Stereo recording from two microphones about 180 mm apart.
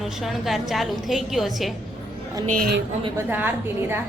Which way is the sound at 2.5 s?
55° right (ahead or behind).